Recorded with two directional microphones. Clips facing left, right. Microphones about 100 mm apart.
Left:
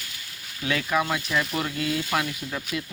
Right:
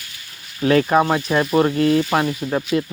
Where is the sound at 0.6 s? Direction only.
45° right (ahead or behind).